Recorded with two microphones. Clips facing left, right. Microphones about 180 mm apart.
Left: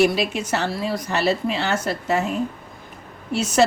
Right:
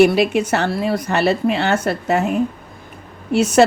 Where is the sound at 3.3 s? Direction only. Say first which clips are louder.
Right 5 dB; 60° right (ahead or behind).